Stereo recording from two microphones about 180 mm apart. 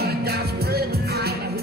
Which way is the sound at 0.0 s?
60° right (ahead or behind).